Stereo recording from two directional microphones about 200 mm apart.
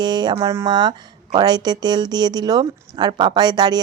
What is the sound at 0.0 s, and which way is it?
Speech, 20° right (ahead or behind).